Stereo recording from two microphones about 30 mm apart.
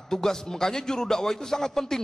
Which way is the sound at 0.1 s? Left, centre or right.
Centre.